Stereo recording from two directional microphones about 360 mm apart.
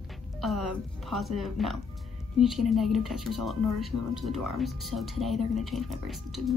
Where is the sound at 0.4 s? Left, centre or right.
Centre.